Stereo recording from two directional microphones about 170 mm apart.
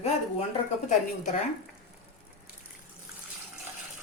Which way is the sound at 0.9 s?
45° left (ahead or behind).